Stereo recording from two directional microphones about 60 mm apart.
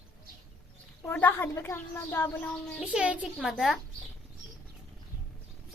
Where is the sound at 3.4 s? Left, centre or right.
Centre.